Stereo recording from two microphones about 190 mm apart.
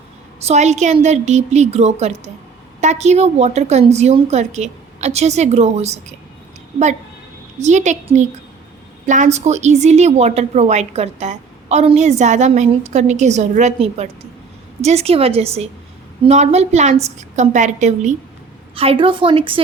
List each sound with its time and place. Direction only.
0.4 s a woman's voice: 35° right (ahead or behind)
7.6 s a woman's voice: 40° right (ahead or behind)